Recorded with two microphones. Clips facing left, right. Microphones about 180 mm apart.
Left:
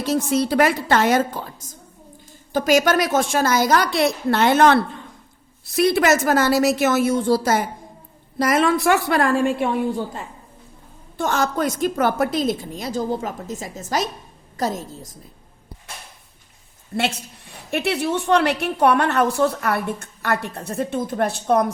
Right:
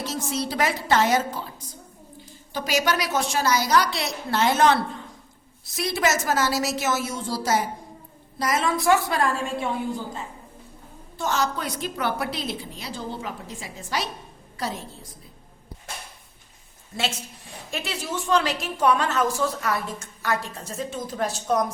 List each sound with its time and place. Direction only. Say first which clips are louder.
0.0 s a woman's voice: left 8 dB; 60° left (ahead or behind)
11.2 s a woman's voice: left 5 dB; 50° left (ahead or behind)
17.0 s a woman's voice: left 5 dB; 65° left (ahead or behind)